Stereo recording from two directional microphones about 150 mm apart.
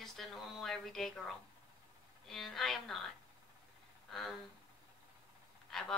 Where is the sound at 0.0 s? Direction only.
Centre (ahead or behind).